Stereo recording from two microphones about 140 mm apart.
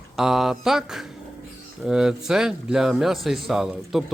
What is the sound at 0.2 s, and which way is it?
Speech, centre (ahead or behind).